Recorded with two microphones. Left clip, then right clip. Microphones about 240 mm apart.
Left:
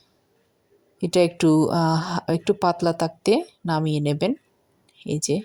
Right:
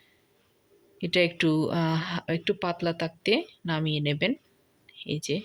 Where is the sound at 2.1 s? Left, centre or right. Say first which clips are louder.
Left 6 dB; left.